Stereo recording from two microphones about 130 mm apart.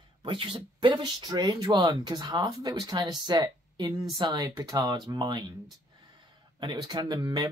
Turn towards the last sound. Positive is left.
turn(degrees=-30)  # may be behind; listen again after turning